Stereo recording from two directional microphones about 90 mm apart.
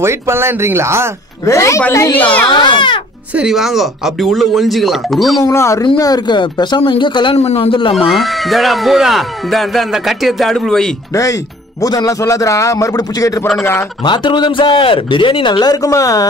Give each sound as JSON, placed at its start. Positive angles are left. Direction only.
{"t": 0.0, "sound": "speech", "side_deg": -30}
{"t": 1.4, "sound": "a man's voice", "side_deg": 35}
{"t": 1.8, "sound": "speech", "side_deg": 25}
{"t": 2.5, "sound": "speech", "side_deg": 60}
{"t": 3.3, "sound": "speech", "side_deg": -5}
{"t": 5.4, "sound": "a man's voice", "side_deg": 30}
{"t": 5.9, "sound": "speech", "side_deg": 45}
{"t": 8.1, "sound": "speech", "side_deg": 0}
{"t": 11.8, "sound": "a man's voice", "side_deg": 45}
{"t": 14.0, "sound": "a man's voice", "side_deg": 60}
{"t": 15.6, "sound": "a man's voice", "side_deg": 40}